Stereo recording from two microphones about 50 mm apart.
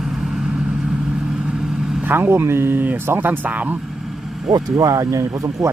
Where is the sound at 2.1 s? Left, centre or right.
Right.